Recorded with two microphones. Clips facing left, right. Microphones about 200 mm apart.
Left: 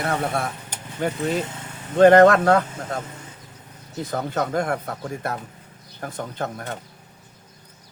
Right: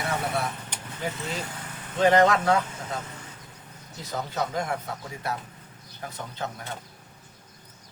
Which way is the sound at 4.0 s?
55° left (ahead or behind).